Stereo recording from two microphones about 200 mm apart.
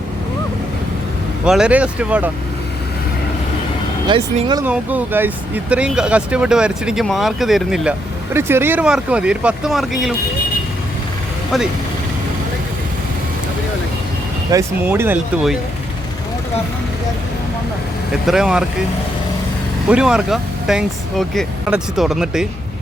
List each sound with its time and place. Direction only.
1.5 s speech: 5° right (ahead or behind)
4.0 s speech: 25° right (ahead or behind)
4.6 s speech: 5° right (ahead or behind)
8.3 s speech: 10° right (ahead or behind)
14.5 s speech: 10° right (ahead or behind)
18.1 s speech: centre (ahead or behind)
19.9 s speech: 5° right (ahead or behind)